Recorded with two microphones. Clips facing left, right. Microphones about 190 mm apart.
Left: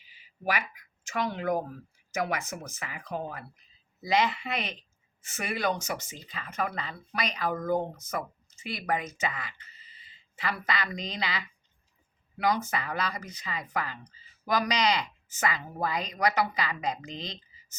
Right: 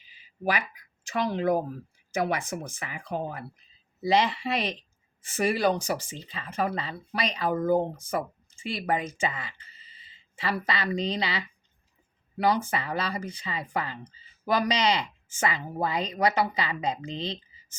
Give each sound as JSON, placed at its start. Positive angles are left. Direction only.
{"t": 0.4, "sound": "speech", "side_deg": -30}